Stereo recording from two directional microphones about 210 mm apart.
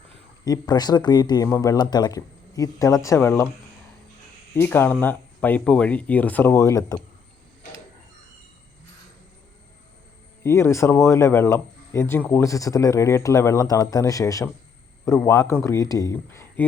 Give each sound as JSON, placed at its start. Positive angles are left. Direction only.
{"t": 0.7, "sound": "speech", "side_deg": 20}
{"t": 4.5, "sound": "speech", "side_deg": 10}
{"t": 10.4, "sound": "speech", "side_deg": 15}